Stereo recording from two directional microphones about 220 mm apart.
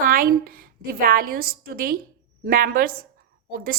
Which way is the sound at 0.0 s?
40° right (ahead or behind).